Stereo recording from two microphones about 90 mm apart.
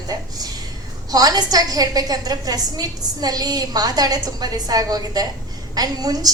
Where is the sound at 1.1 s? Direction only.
45° right (ahead or behind).